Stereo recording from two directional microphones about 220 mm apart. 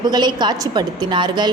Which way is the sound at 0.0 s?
20° right (ahead or behind).